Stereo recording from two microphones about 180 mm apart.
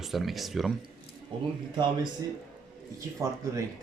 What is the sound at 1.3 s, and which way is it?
Speech, 25° right (ahead or behind).